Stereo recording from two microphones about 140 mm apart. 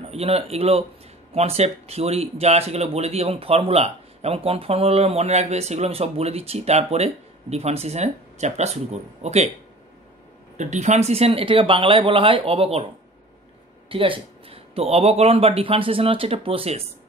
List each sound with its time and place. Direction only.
0.1 s speech: 45° right (ahead or behind)
10.6 s speech: 60° right (ahead or behind)
13.8 s speech: 40° right (ahead or behind)